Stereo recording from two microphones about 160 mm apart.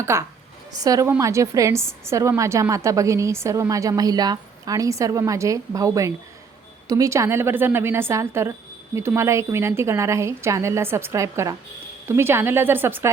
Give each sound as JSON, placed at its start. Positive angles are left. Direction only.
{"t": 0.0, "sound": "a woman's voice", "side_deg": -15}